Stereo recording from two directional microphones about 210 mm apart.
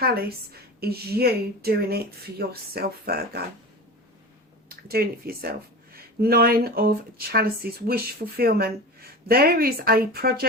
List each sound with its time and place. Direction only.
0.0 s speech: 45° right (ahead or behind)
4.7 s speech: 45° right (ahead or behind)